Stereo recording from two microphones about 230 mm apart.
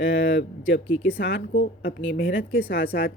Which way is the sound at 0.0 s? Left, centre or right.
Left.